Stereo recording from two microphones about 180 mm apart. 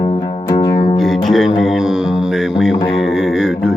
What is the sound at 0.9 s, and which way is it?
Music, centre (ahead or behind).